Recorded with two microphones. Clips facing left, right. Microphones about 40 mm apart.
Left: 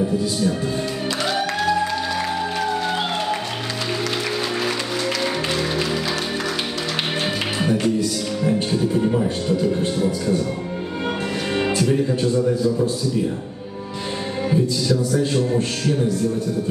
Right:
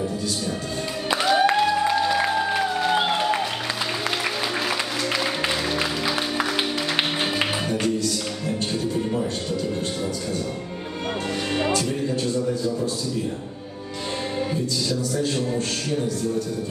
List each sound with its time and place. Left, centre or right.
0.2 s a man's voice: centre
1.4 s music: centre
1.7 s music: centre
7.8 s speech: centre
11.5 s music: centre
11.9 s a man's voice: centre
14.5 s a man's voice: centre